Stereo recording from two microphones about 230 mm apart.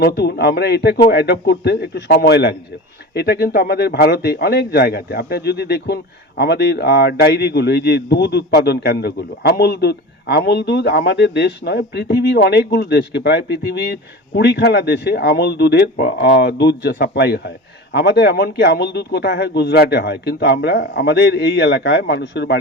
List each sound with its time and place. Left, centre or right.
0.0 s speech: left